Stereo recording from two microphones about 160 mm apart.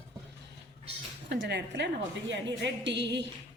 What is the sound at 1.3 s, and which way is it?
Speech, 90° right.